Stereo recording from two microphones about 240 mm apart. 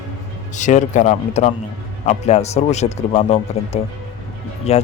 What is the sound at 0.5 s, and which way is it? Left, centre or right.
Speech, left.